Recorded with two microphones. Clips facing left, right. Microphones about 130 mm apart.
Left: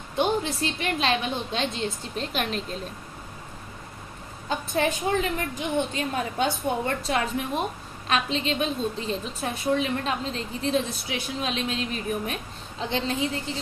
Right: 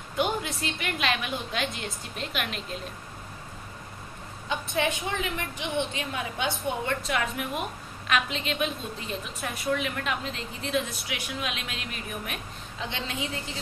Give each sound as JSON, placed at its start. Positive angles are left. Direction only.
{"t": 0.1, "sound": "a woman's voice", "side_deg": 30}
{"t": 4.5, "sound": "a woman's voice", "side_deg": 40}